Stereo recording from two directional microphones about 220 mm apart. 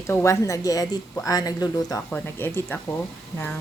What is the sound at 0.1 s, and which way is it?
Speech, 15° left (ahead or behind).